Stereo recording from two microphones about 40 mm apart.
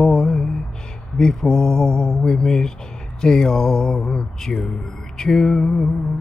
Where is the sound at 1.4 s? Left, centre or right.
Centre.